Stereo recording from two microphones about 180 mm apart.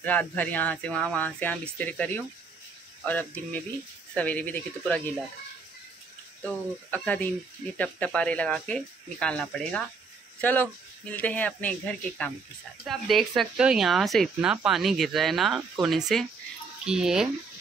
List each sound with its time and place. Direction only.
0.0 s speech: 10° left (ahead or behind)
6.4 s speech: 10° left (ahead or behind)